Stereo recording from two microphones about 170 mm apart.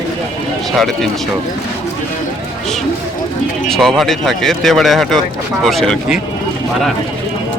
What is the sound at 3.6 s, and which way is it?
Speech, centre (ahead or behind).